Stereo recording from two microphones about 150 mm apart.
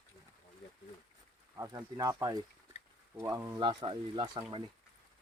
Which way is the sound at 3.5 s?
30° right (ahead or behind).